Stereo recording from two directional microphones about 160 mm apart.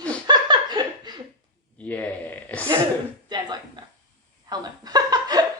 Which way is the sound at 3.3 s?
25° right (ahead or behind).